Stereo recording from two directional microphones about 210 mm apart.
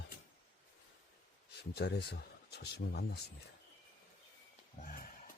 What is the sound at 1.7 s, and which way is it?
Speech, 50° left (ahead or behind).